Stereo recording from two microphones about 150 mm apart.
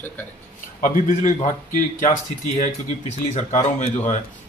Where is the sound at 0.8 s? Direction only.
55° left (ahead or behind).